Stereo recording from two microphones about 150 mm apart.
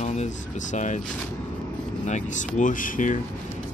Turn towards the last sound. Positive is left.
turn(degrees=60)  # may be behind; listen again after turning